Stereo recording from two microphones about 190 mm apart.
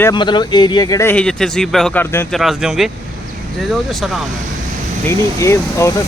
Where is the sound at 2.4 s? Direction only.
Centre (ahead or behind).